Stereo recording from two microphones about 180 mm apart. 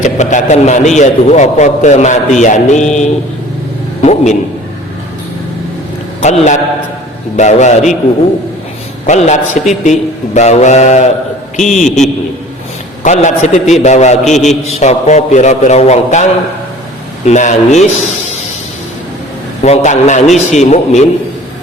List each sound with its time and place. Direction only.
0.0 s a man's voice: 40° left (ahead or behind)
6.2 s a man's voice: 40° left (ahead or behind)
9.0 s a man's voice: 40° left (ahead or behind)
13.0 s a man's voice: 40° left (ahead or behind)
17.2 s a man's voice: 40° left (ahead or behind)
19.6 s a man's voice: 40° left (ahead or behind)